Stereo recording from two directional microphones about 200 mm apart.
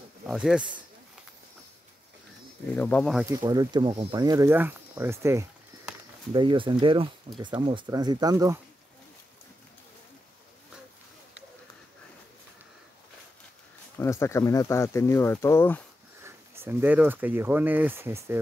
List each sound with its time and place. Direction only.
0.3 s speech: 5° right (ahead or behind)
2.7 s speech: 5° left (ahead or behind)
3.3 s speech: 20° right (ahead or behind)
6.3 s speech: 25° right (ahead or behind)
13.9 s speech: 15° left (ahead or behind)
16.2 s speech: 10° right (ahead or behind)